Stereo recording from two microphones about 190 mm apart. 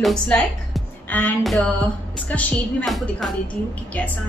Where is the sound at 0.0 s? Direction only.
5° left (ahead or behind).